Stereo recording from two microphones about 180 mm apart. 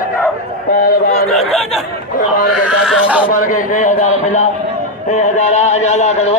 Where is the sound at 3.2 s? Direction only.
45° left (ahead or behind).